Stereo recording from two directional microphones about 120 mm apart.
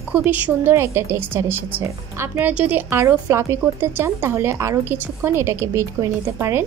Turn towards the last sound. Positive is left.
turn(degrees=-25)  # may be behind; listen again after turning